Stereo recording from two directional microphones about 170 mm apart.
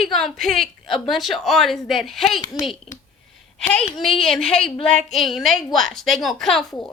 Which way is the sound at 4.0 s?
5° left (ahead or behind).